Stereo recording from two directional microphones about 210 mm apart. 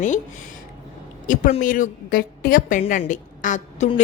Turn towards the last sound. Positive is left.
turn(degrees=35)  # may be behind; listen again after turning